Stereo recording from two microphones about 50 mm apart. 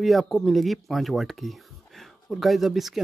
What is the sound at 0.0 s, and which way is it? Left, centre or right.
Speech, centre.